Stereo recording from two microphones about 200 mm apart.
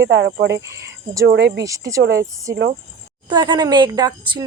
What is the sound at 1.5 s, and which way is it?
Speech, 15° right (ahead or behind).